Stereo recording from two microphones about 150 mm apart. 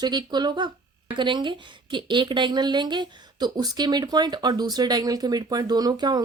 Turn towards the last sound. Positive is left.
turn(degrees=-30)  # may be behind; listen again after turning